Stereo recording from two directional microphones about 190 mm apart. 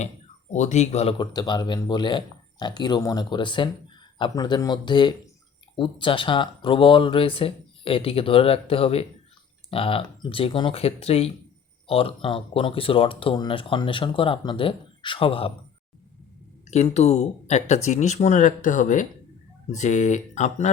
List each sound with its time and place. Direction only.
0.5 s speech: 35° left (ahead or behind)
16.6 s speech: 35° left (ahead or behind)